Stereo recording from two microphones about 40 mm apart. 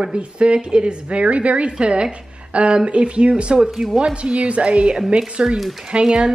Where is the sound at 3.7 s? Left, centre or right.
Centre.